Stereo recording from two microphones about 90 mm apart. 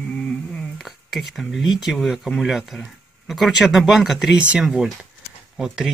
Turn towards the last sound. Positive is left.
turn(degrees=-5)  # may be behind; listen again after turning